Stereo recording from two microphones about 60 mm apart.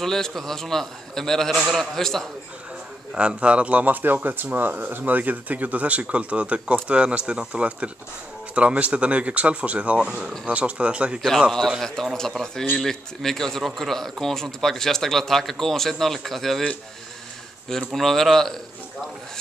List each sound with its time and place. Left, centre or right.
0.0 s a man's voice: centre
3.2 s speech: centre
11.8 s a man's voice: centre
17.6 s a man's voice: centre